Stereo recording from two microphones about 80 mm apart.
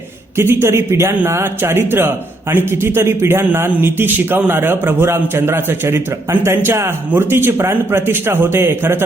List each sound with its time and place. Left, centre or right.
0.3 s a man's voice: right